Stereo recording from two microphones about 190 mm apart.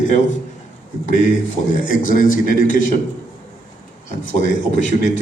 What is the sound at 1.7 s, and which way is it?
Speech, 45° left (ahead or behind).